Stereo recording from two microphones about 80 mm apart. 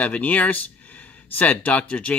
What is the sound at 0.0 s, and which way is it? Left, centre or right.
Speech, centre.